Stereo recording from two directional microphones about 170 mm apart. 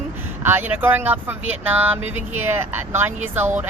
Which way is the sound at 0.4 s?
10° right (ahead or behind).